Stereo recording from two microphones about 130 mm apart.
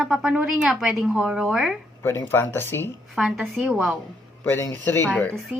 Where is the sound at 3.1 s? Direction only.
5° right (ahead or behind).